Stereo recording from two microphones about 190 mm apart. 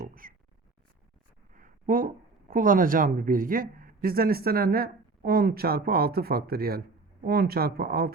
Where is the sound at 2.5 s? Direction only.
45° right (ahead or behind).